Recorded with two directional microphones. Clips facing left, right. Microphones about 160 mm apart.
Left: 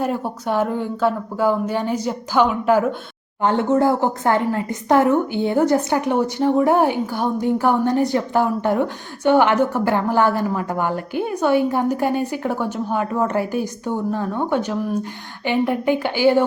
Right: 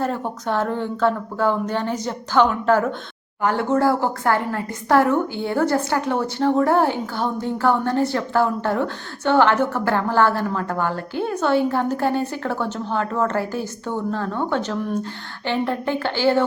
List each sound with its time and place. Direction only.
0.0 s a woman's voice: 10° left (ahead or behind)
3.4 s a woman's voice: 20° left (ahead or behind)